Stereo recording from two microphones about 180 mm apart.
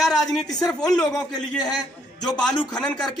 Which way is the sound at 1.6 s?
20° left (ahead or behind).